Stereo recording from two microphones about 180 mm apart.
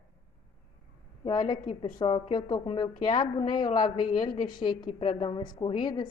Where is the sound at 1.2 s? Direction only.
25° left (ahead or behind).